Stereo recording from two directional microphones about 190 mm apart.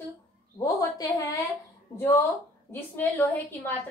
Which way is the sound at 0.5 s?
20° left (ahead or behind).